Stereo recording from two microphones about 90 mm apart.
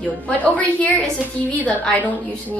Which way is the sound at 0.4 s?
15° left (ahead or behind).